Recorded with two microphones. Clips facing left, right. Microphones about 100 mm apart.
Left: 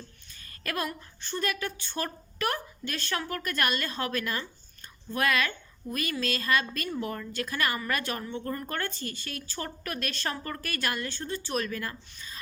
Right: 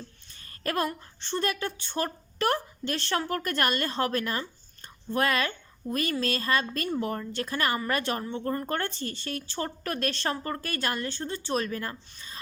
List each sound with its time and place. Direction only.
0.6 s a woman's voice: 35° right (ahead or behind)